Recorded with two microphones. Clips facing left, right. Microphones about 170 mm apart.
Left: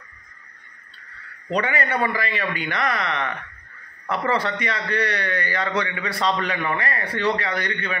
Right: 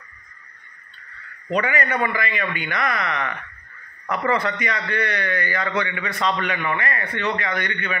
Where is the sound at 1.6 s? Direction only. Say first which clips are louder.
Even; 30° left (ahead or behind).